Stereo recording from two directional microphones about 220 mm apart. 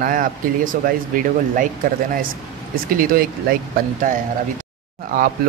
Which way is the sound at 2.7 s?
40° right (ahead or behind).